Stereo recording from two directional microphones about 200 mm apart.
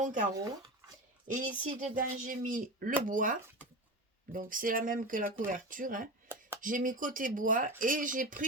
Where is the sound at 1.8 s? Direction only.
40° right (ahead or behind).